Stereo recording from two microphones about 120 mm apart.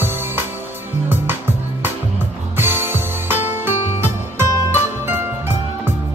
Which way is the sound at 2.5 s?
20° right (ahead or behind).